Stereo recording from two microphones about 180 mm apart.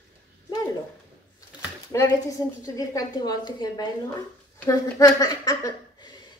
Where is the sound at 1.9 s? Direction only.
15° left (ahead or behind).